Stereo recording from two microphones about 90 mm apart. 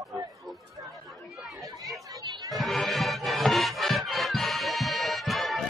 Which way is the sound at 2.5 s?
Centre (ahead or behind).